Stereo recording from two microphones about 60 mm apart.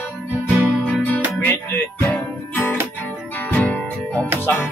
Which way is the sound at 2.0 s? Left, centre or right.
Left.